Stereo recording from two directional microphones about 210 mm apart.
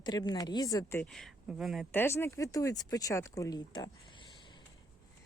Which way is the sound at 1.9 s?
10° left (ahead or behind).